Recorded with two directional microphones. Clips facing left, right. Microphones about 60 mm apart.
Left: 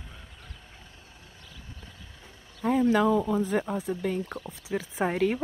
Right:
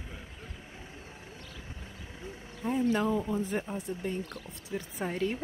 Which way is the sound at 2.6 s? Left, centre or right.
Left.